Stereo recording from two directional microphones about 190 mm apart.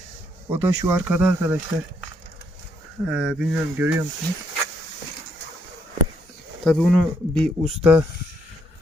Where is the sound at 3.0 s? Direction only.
5° right (ahead or behind).